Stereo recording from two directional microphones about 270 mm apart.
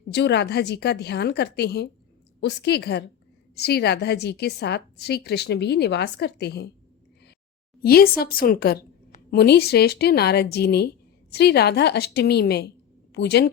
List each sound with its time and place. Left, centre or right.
0.1 s a woman's voice: left
7.8 s a woman's voice: left